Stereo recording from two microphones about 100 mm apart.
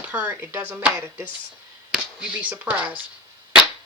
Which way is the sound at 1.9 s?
10° right (ahead or behind).